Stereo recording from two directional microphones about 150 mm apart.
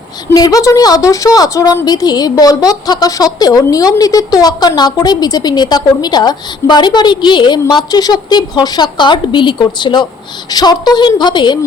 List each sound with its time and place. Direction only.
0.3 s a woman's voice: 25° left (ahead or behind)